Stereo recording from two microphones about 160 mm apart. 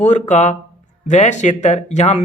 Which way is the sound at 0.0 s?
50° left (ahead or behind).